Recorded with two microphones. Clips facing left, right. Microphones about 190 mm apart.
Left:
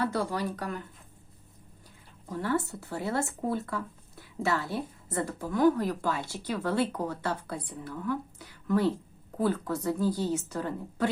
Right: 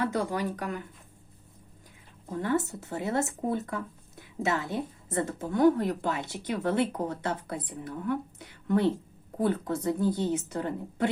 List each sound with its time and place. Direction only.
0.0 s speech: 15° right (ahead or behind)
2.3 s speech: 20° right (ahead or behind)